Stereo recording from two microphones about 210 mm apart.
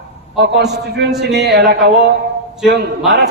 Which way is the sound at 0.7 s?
55° right (ahead or behind).